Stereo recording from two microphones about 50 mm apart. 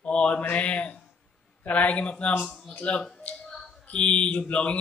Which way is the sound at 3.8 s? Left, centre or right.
Left.